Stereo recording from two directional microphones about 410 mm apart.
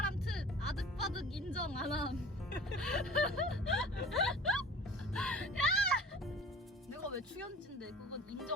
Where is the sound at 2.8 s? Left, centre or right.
Centre.